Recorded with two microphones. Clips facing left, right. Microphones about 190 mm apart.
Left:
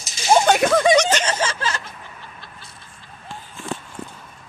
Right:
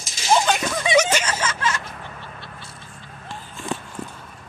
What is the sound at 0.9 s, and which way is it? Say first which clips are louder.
Speech: left 2 dB; 5° right (ahead or behind).